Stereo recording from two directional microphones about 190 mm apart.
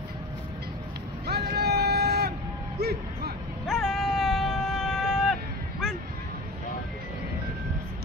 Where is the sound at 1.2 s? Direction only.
55° right (ahead or behind).